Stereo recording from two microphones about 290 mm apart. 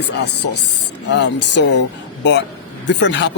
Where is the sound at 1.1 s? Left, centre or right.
Left.